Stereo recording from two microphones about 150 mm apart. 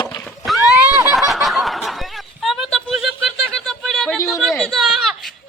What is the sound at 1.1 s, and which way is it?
Snicker, centre (ahead or behind).